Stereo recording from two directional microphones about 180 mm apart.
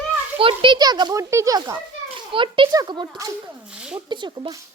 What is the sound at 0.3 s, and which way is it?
A child's voice, 30° right (ahead or behind).